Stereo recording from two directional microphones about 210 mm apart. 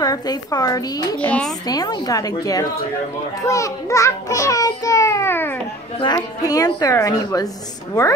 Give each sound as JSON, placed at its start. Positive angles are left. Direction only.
{"t": 0.0, "sound": "a woman's voice", "side_deg": 20}
{"t": 1.7, "sound": "a woman's voice", "side_deg": 20}